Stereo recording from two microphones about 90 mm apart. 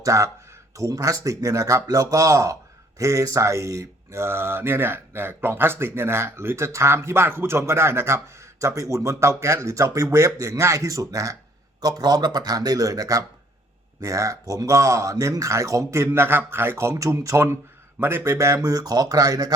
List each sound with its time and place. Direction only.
0.0 s speech: 35° right (ahead or behind)